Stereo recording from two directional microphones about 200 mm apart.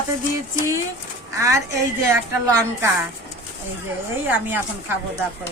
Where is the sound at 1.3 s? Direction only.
15° right (ahead or behind).